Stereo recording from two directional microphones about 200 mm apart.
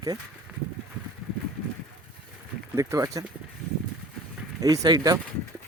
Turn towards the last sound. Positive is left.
turn(degrees=-20)  # may be behind; listen again after turning